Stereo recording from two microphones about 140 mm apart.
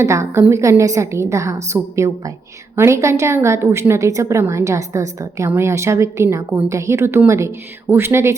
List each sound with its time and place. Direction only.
0.0 s a woman's voice: 20° right (ahead or behind)